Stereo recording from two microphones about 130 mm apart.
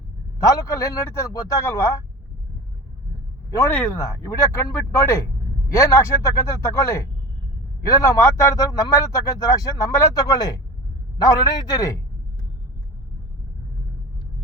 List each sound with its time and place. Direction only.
0.3 s speech: 25° left (ahead or behind)
3.9 s speech: 25° left (ahead or behind)